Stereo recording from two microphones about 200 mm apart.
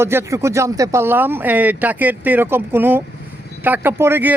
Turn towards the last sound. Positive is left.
turn(degrees=-10)  # may be behind; listen again after turning